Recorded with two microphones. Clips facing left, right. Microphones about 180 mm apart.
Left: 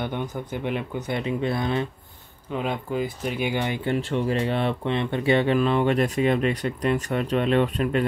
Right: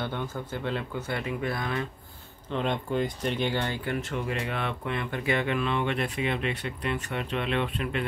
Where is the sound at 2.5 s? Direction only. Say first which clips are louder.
Left 1 dB; 5° left (ahead or behind); by 8.0 s 40° left (ahead or behind).